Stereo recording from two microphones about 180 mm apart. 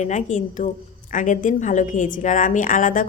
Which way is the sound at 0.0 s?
40° left (ahead or behind).